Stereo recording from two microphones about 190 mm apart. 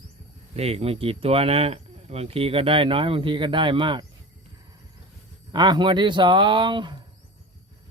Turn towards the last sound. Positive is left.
turn(degrees=-25)  # may be behind; listen again after turning